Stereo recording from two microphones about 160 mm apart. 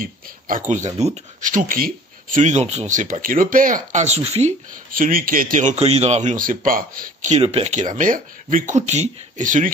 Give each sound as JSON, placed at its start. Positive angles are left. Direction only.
{"t": 0.0, "sound": "speech", "side_deg": -55}